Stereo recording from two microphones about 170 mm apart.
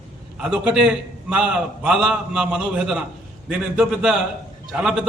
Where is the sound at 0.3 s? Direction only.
5° right (ahead or behind).